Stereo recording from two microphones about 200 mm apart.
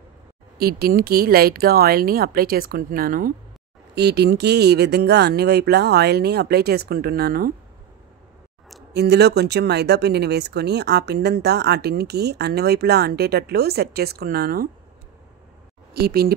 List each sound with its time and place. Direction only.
0.6 s speech: 50° right (ahead or behind)
3.9 s speech: 55° right (ahead or behind)
8.9 s speech: 55° right (ahead or behind)
15.9 s speech: 50° right (ahead or behind)